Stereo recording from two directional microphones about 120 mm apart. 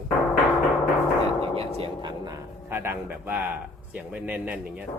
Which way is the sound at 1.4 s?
55° right (ahead or behind).